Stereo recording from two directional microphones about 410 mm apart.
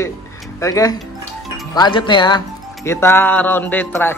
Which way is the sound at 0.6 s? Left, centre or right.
Centre.